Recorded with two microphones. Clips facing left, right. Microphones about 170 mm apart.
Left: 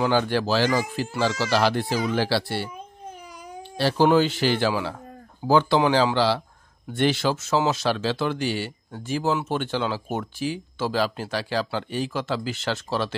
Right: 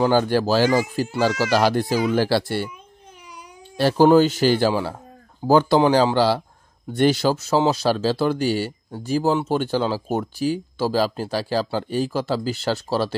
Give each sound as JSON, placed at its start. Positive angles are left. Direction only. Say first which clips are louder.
{"t": 0.1, "sound": "speech", "louder": "right 4 dB", "side_deg": -45}
{"t": 3.7, "sound": "speech", "louder": "right 5 dB", "side_deg": -45}